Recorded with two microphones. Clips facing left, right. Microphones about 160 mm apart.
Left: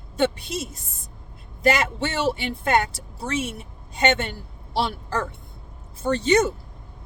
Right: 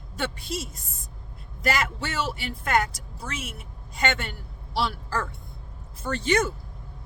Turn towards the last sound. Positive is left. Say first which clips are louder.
# left 5 dB
turn(degrees=20)  # may be behind; listen again after turning